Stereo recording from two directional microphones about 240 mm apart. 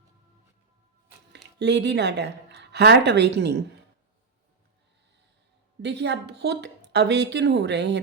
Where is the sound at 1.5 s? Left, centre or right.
Right.